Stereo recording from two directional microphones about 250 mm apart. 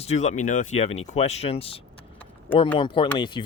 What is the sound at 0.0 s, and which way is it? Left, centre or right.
Speech, left.